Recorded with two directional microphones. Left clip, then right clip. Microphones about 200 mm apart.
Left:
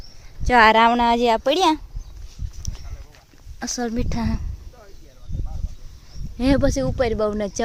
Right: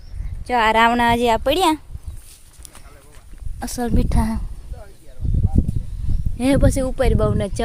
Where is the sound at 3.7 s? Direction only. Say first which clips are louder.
Right 4 dB; 5° right (ahead or behind).